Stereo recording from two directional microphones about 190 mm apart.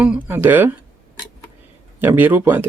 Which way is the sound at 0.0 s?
10° right (ahead or behind).